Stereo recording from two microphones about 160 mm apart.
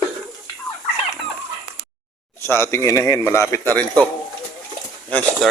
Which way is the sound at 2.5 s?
15° left (ahead or behind).